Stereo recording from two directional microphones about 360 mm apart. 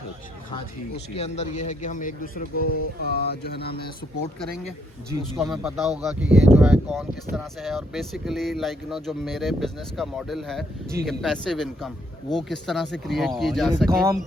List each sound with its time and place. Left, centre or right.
1.1 s a man's voice: centre
2.6 s a man's voice: left
5.4 s speech: centre